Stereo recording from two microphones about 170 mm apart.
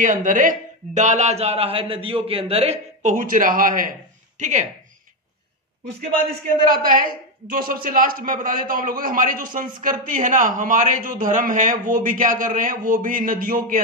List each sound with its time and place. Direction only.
0.0 s a man's voice: 50° right (ahead or behind)
6.7 s a man's voice: 55° right (ahead or behind)